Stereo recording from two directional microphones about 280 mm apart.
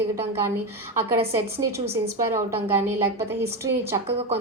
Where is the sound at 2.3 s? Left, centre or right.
Centre.